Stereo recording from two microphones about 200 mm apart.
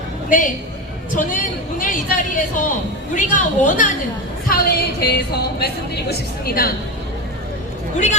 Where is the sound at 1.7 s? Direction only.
40° left (ahead or behind).